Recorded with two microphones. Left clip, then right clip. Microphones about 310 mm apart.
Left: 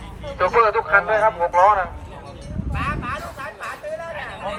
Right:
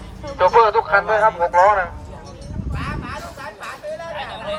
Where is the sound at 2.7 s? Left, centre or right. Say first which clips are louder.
Left 4 dB; centre.